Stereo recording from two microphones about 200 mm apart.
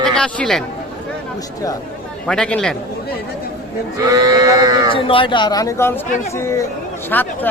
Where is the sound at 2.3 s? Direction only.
5° left (ahead or behind).